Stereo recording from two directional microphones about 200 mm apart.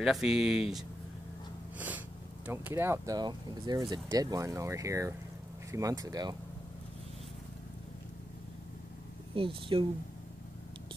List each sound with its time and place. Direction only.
0.0 s speech: centre (ahead or behind); by 6.3 s 20° right (ahead or behind)
9.3 s speech: 25° right (ahead or behind)